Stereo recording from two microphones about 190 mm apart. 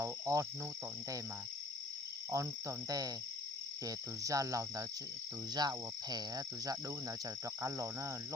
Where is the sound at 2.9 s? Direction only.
20° right (ahead or behind).